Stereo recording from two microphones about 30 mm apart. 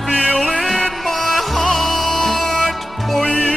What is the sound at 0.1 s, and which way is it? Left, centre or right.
Music, left.